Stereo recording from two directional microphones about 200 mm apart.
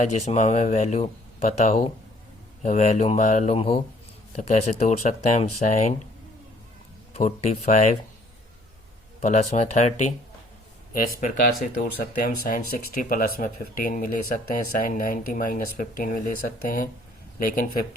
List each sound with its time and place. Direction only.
0.0 s speech: 35° left (ahead or behind)
7.1 s speech: 35° left (ahead or behind)
9.2 s speech: 35° left (ahead or behind)